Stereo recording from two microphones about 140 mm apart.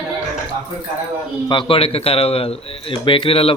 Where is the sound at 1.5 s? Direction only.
40° left (ahead or behind).